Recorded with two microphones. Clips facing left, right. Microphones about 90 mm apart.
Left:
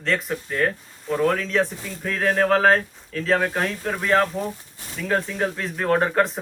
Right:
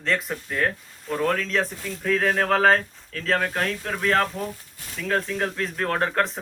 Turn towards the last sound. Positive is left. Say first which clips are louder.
# left 4 dB
turn(degrees=5)  # may be behind; listen again after turning